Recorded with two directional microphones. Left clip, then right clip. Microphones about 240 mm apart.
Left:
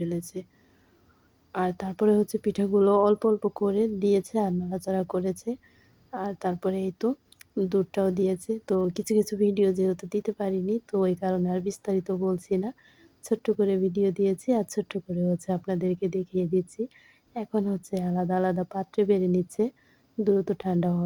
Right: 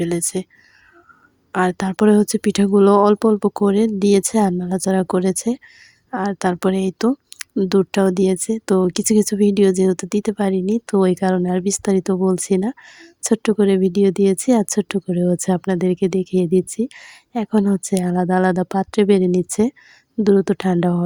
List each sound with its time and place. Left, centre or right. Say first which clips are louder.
0.0 s speech: right 11 dB; right
1.5 s speech: right 9 dB; right